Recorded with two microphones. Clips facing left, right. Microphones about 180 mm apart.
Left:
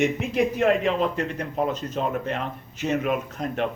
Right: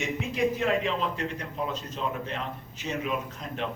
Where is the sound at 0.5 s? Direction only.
60° left (ahead or behind).